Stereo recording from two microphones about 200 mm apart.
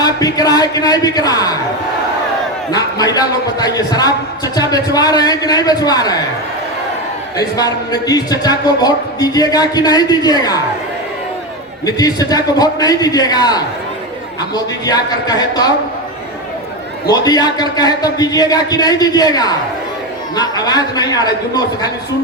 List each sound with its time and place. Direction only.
0.0 s a man's voice: 20° left (ahead or behind)
2.7 s a man's voice: 20° left (ahead or behind)
7.3 s a man's voice: 20° left (ahead or behind)
11.9 s a man's voice: 20° left (ahead or behind)
17.1 s a man's voice: 20° left (ahead or behind)